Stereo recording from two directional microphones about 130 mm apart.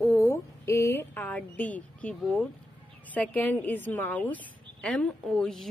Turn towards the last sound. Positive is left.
turn(degrees=5)  # may be behind; listen again after turning